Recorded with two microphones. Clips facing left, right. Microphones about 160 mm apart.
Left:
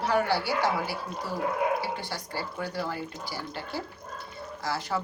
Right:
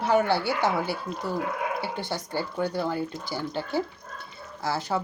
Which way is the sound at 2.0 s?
25° right (ahead or behind).